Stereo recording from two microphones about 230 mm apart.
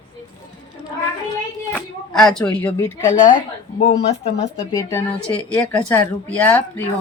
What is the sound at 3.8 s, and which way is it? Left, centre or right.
Speech, left.